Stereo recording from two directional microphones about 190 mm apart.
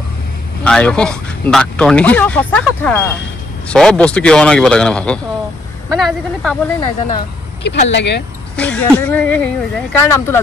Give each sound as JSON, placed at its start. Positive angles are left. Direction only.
{"t": 0.7, "sound": "a man's voice", "side_deg": 5}
{"t": 6.8, "sound": "speech", "side_deg": 25}
{"t": 7.6, "sound": "speech", "side_deg": 65}
{"t": 8.5, "sound": "speech", "side_deg": 5}